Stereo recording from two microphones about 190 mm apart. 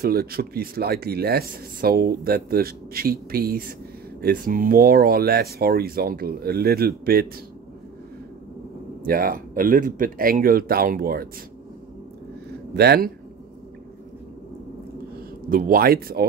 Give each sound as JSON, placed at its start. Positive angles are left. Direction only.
{"t": 0.0, "sound": "speech", "side_deg": -55}
{"t": 9.0, "sound": "speech", "side_deg": -50}
{"t": 12.7, "sound": "speech", "side_deg": -60}
{"t": 15.5, "sound": "speech", "side_deg": -50}